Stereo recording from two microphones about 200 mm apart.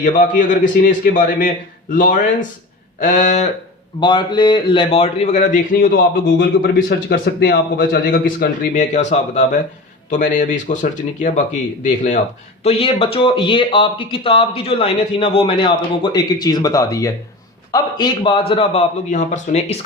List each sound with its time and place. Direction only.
0.0 s a man's voice: 40° left (ahead or behind)
4.0 s a man's voice: 20° left (ahead or behind); by 10.8 s 40° left (ahead or behind)
11.8 s a man's voice: 35° left (ahead or behind)